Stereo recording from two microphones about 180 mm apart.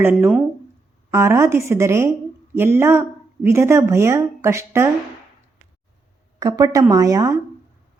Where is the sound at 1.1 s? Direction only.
15° right (ahead or behind).